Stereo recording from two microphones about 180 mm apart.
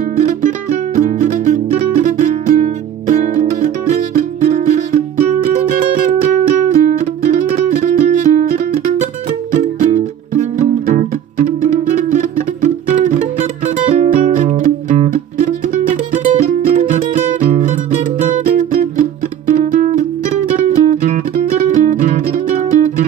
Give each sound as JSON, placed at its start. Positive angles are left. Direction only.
{"t": 0.9, "sound": "music", "side_deg": -40}